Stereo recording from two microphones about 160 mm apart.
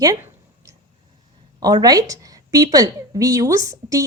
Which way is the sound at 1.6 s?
25° right (ahead or behind).